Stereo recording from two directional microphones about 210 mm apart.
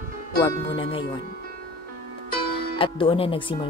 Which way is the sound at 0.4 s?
25° left (ahead or behind).